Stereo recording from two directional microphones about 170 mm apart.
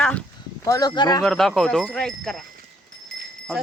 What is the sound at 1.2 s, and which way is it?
Speech, centre (ahead or behind).